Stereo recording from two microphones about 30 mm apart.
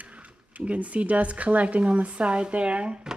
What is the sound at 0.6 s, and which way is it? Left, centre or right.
Speech, right.